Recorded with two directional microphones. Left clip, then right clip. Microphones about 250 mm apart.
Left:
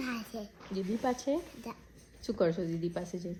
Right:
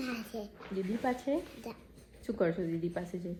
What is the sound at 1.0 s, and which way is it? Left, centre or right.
Speech, left.